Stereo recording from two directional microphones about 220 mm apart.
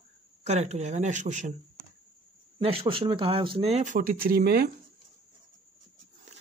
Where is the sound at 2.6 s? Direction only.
25° right (ahead or behind); by 4.7 s 45° right (ahead or behind).